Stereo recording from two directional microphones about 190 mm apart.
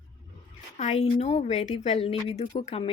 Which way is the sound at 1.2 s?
35° left (ahead or behind).